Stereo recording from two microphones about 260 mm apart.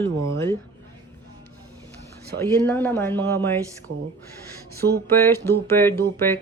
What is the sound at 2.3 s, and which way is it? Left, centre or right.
Speech, centre.